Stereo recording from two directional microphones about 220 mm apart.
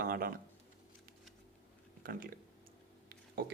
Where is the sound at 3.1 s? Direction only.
45° right (ahead or behind).